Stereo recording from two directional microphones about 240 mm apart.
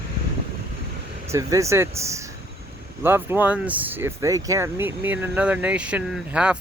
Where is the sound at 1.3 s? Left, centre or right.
Centre.